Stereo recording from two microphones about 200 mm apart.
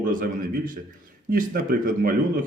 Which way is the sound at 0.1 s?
45° right (ahead or behind).